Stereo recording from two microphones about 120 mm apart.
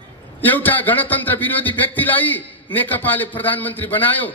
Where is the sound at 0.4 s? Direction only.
15° left (ahead or behind).